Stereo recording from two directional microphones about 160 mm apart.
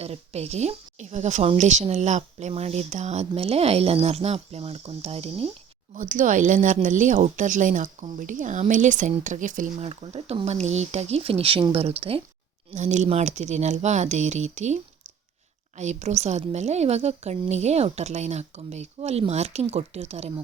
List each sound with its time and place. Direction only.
0.0 s speech: 40° right (ahead or behind)
6.0 s speech: 55° right (ahead or behind); by 12.2 s 35° right (ahead or behind)
12.7 s speech: 45° right (ahead or behind)
15.8 s speech: 45° right (ahead or behind)